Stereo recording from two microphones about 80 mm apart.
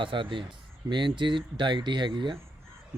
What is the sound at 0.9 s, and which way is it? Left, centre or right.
Speech, right.